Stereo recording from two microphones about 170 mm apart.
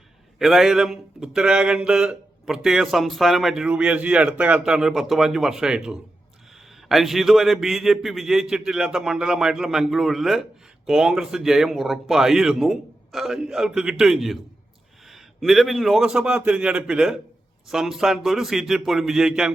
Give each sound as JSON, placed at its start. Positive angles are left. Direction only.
{"t": 0.3, "sound": "speech", "side_deg": 0}